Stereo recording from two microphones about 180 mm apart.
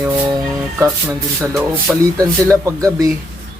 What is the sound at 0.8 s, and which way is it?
Speech, 10° right (ahead or behind).